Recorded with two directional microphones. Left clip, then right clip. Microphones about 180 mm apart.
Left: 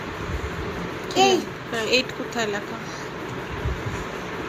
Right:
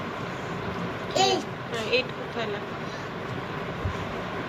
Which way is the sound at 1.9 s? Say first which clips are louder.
Left 4 dB; 50° left (ahead or behind).